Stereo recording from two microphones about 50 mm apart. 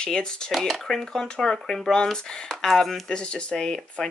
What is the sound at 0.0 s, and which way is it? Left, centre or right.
Speech, centre.